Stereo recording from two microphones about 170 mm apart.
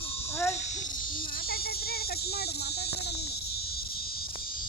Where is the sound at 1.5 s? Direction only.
65° left (ahead or behind).